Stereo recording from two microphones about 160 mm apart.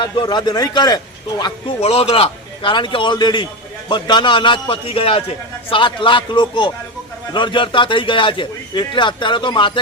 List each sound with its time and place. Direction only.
0.0 s a man's voice: 30° left (ahead or behind)
1.8 s a man's voice: 35° left (ahead or behind)